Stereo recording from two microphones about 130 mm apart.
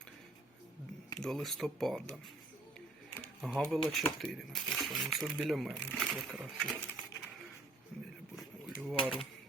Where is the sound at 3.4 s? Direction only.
Centre (ahead or behind).